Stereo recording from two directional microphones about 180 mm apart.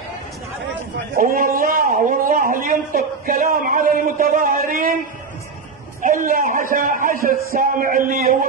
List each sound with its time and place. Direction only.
1.1 s a man's voice: 50° right (ahead or behind)
6.0 s a man's voice: 50° right (ahead or behind)